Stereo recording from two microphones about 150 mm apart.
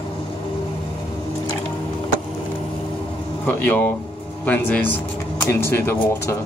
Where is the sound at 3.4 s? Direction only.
10° left (ahead or behind).